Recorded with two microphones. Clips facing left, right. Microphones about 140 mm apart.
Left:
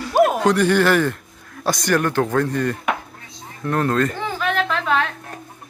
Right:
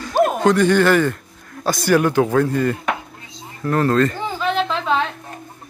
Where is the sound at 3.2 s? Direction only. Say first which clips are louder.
Right 2 dB; centre (ahead or behind).